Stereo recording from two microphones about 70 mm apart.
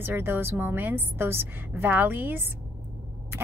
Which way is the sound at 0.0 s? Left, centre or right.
Right.